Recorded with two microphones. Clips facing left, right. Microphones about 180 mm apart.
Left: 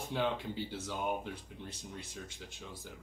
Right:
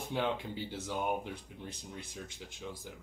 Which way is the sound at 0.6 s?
15° right (ahead or behind).